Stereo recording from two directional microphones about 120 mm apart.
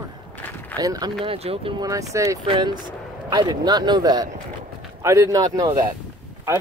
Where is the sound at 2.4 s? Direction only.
45° right (ahead or behind).